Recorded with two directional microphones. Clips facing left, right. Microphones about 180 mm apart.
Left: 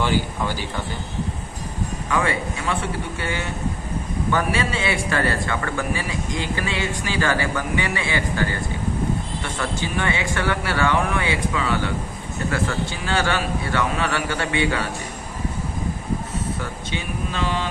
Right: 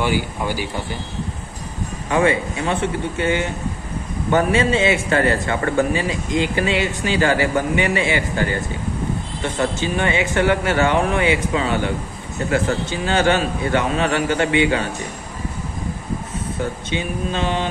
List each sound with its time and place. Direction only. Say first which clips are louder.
0.0 s speech: right 1 dB; 15° right (ahead or behind)
2.0 s a man's voice: right 6 dB; 25° right (ahead or behind)
16.9 s a man's voice: right 3 dB; 20° right (ahead or behind)